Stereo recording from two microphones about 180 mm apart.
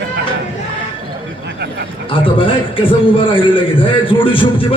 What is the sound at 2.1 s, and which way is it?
A man's voice, 30° left (ahead or behind).